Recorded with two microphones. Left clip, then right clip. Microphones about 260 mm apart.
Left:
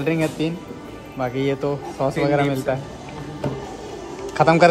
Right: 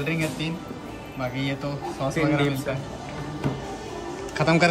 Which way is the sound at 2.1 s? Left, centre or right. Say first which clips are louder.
Left 3 dB; right.